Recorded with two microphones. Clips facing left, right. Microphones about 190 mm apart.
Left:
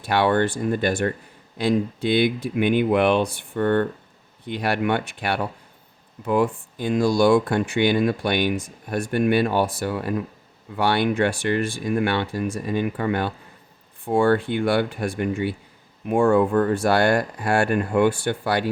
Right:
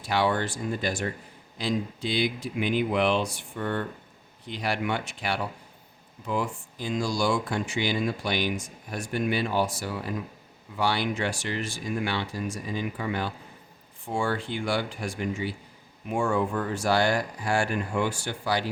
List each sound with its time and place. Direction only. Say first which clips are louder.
0.0 s speech: left 6 dB; 60° left (ahead or behind)